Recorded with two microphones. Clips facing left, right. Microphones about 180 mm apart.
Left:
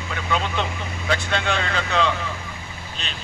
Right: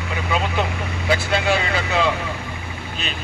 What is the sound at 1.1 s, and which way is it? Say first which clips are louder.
Speech: right 4 dB; 5° right (ahead or behind).